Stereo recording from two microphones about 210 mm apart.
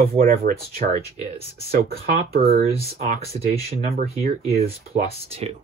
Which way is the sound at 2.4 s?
30° right (ahead or behind).